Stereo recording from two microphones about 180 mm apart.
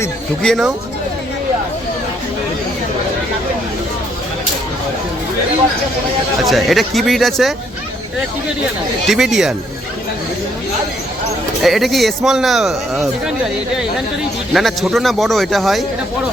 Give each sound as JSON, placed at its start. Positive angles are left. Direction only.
{"t": 0.4, "sound": "speech", "side_deg": 0}
{"t": 6.4, "sound": "speech", "side_deg": 0}
{"t": 9.0, "sound": "speech", "side_deg": 0}
{"t": 11.6, "sound": "speech", "side_deg": 0}
{"t": 14.5, "sound": "speech", "side_deg": 0}